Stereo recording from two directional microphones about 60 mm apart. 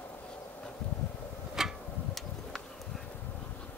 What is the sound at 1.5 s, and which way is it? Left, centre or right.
Tick-tock, centre.